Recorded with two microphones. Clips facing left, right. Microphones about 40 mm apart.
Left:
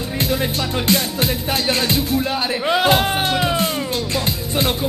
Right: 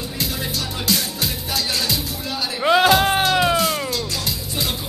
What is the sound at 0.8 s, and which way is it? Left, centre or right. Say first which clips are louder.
Music: left 4 dB; left.